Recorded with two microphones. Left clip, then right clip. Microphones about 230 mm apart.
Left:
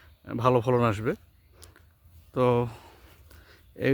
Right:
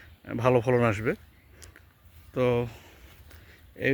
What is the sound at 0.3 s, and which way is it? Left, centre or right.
Speech, centre.